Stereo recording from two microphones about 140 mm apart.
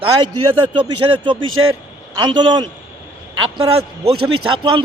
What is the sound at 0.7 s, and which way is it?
A man's voice, 35° right (ahead or behind).